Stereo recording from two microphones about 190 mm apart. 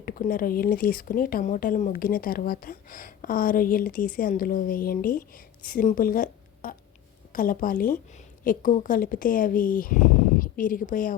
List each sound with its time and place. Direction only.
0.0 s speech: 50° left (ahead or behind)